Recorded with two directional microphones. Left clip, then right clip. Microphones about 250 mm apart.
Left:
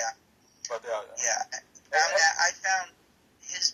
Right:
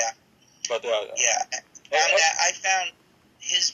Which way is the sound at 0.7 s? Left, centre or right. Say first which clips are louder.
Right 8 dB; centre.